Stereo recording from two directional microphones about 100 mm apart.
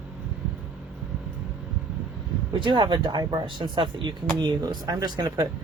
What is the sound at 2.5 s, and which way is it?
Speech, 55° right (ahead or behind).